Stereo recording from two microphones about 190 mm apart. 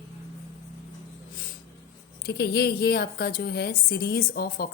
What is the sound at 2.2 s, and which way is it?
A woman's voice, 55° left (ahead or behind).